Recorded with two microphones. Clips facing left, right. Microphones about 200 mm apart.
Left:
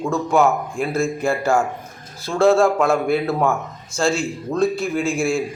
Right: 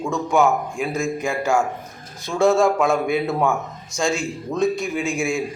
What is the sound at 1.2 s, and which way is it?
Speech, 15° right (ahead or behind).